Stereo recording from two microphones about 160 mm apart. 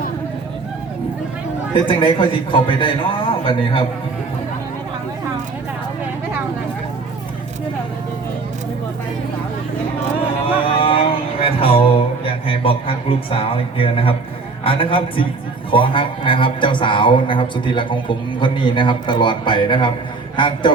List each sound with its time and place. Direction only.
1.7 s speech: 30° left (ahead or behind)
10.4 s a sound: 35° left (ahead or behind)
14.6 s a man's voice: 35° left (ahead or behind)